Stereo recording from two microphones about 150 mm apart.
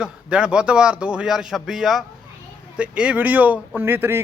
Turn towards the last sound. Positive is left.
turn(degrees=-15)  # may be behind; listen again after turning